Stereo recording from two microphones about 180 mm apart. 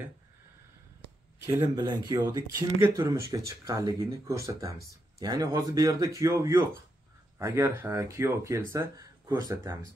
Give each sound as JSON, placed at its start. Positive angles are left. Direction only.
{"t": 1.4, "sound": "speech", "side_deg": -15}